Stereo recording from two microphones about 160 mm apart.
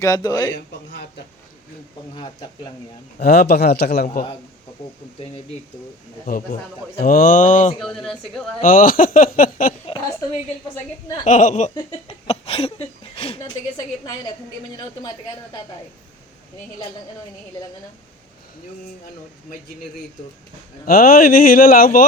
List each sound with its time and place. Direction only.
0.0 s a man's voice: 25° left (ahead or behind)
2.1 s a man's voice: 30° left (ahead or behind)
3.2 s a man's voice: 80° left
6.2 s speech: 60° left (ahead or behind)
7.8 s speech: 5° left (ahead or behind)
8.6 s speech: 60° left (ahead or behind)
9.8 s a woman's voice: 30° left (ahead or behind)
11.3 s speech: 50° left (ahead or behind)
11.7 s speech: 35° left (ahead or behind)
20.8 s speech: 65° left (ahead or behind)